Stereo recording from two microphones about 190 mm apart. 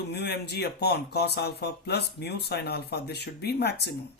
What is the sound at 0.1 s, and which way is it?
Speech, 60° left (ahead or behind).